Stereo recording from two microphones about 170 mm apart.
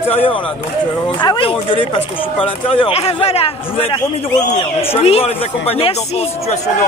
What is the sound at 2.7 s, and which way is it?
Speech, 35° left (ahead or behind).